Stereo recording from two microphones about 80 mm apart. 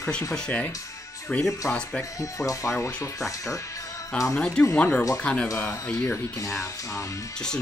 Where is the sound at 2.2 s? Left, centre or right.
Left.